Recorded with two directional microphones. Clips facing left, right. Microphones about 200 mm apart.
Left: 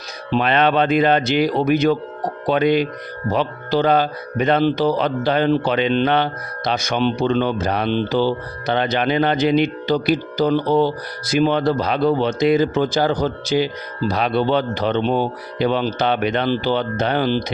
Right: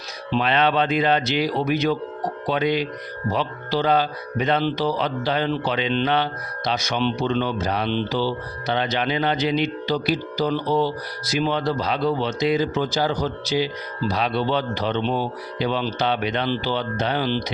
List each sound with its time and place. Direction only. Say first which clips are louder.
0.3 s speech: left 3 dB; 50° left (ahead or behind)